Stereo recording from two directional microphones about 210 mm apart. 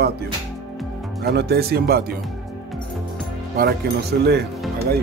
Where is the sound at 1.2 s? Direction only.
50° right (ahead or behind).